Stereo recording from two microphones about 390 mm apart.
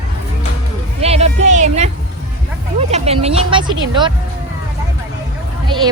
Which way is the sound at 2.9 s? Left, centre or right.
Centre.